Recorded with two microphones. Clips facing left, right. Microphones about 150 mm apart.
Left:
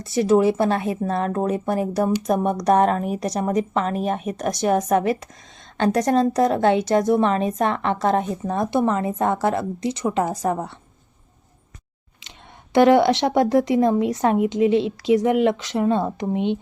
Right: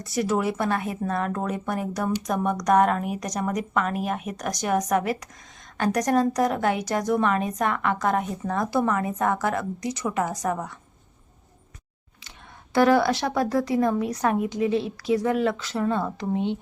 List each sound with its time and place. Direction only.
0.0 s a woman's voice: 25° left (ahead or behind)
12.7 s a woman's voice: 20° left (ahead or behind)